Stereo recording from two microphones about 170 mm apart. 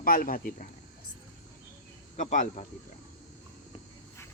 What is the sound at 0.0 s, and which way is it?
Speech, 55° left (ahead or behind).